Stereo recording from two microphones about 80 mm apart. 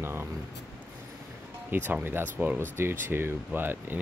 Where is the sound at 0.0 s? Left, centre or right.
Right.